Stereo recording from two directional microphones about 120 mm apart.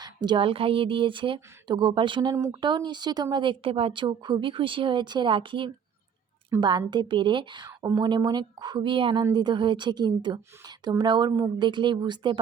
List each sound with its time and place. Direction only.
0.0 s speech: 35° right (ahead or behind)
2.3 s speech: 30° right (ahead or behind)
7.7 s speech: 25° right (ahead or behind)
7.9 s speech: 35° right (ahead or behind)